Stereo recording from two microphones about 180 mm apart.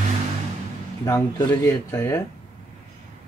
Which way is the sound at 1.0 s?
15° left (ahead or behind).